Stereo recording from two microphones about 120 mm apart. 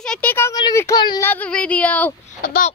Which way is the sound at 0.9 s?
35° left (ahead or behind).